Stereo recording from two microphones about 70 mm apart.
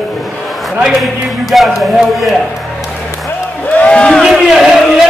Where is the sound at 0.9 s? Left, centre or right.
Centre.